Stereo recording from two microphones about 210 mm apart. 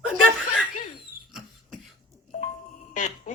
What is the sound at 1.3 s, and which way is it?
Cough, centre (ahead or behind).